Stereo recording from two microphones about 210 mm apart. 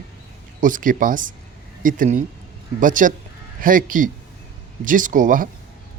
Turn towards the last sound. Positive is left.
turn(degrees=-40)  # may be behind; listen again after turning